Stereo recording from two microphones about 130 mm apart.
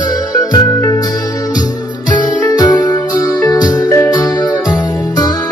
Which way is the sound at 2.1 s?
35° left (ahead or behind).